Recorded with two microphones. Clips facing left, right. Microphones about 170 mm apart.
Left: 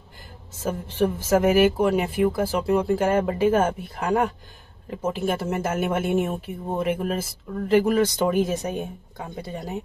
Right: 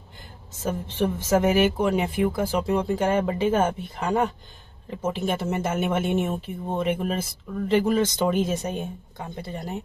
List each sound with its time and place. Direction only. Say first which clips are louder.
0.7 s speech: left 2 dB; 10° left (ahead or behind)